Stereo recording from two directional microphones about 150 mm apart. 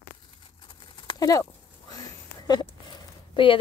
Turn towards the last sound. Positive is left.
turn(degrees=30)  # may be behind; listen again after turning